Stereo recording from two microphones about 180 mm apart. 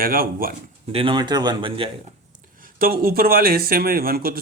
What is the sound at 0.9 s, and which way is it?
Speech, 30° right (ahead or behind).